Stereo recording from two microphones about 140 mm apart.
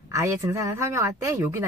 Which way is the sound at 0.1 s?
20° right (ahead or behind).